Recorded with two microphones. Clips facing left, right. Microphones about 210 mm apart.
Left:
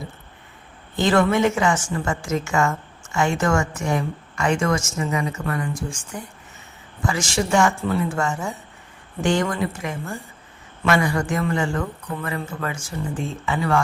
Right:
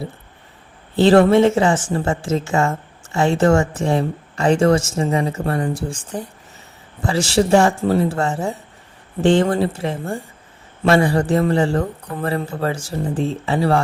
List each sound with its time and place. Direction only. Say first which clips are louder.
0.9 s a woman's voice: right 7 dB; 35° right (ahead or behind)